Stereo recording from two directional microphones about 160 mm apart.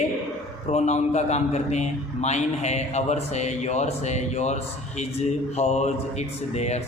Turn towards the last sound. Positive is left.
turn(degrees=45)  # may be behind; listen again after turning